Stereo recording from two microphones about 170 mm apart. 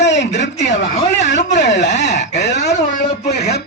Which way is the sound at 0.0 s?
90° left.